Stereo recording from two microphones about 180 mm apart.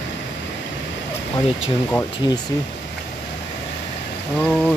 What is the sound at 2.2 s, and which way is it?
Speech, 25° left (ahead or behind).